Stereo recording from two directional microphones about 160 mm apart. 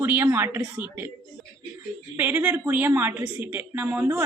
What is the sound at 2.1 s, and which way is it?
A woman's voice, 10° right (ahead or behind).